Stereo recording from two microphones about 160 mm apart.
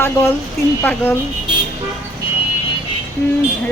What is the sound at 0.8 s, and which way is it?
Speech, 15° left (ahead or behind).